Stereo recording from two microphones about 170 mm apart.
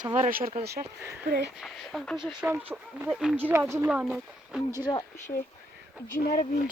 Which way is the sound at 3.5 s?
15° right (ahead or behind).